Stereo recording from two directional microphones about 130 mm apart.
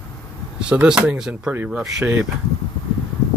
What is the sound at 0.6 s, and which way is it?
Speech, 5° right (ahead or behind).